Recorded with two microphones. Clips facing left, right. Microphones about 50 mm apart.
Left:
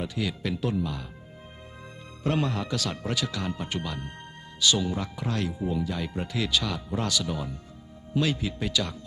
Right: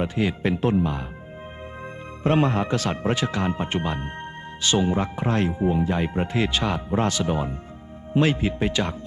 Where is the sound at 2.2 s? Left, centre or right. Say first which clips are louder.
Right 7 dB; right.